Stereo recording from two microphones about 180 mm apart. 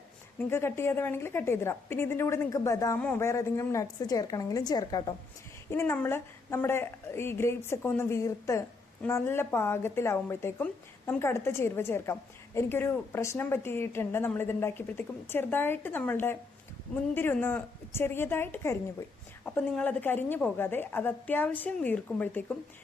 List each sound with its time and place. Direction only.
0.3 s a woman's voice: 15° left (ahead or behind)